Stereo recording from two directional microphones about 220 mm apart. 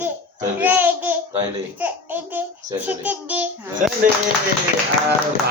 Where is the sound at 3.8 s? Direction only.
35° right (ahead or behind).